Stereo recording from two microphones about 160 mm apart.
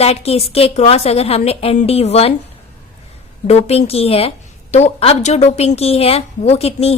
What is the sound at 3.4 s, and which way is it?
A woman's voice, 40° left (ahead or behind).